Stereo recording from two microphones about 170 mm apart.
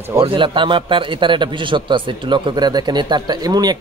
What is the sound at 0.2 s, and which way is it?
A man's voice, 30° right (ahead or behind).